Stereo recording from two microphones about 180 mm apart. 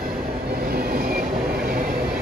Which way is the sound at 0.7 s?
55° right (ahead or behind).